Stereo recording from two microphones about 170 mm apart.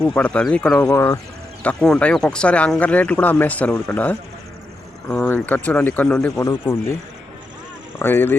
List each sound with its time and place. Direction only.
0.0 s speech: 5° left (ahead or behind)
0.9 s speech: 15° left (ahead or behind)
1.6 s speech: 5° left (ahead or behind)
7.9 s speech: 15° left (ahead or behind)